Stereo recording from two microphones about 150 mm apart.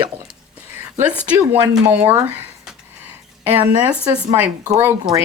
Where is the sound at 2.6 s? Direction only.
10° right (ahead or behind).